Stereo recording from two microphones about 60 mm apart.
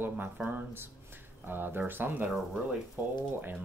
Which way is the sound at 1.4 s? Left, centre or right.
Right.